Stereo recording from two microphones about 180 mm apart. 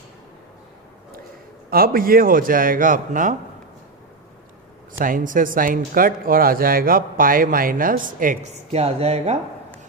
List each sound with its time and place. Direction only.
1.7 s speech: 55° right (ahead or behind)
4.9 s speech: 50° right (ahead or behind)